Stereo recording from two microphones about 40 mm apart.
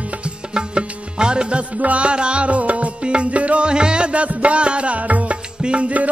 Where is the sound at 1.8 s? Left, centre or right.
Right.